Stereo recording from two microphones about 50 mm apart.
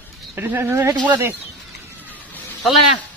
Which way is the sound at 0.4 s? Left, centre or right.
Right.